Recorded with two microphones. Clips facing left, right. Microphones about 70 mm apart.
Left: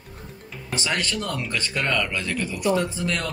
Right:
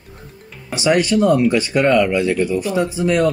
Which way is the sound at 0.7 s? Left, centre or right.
Centre.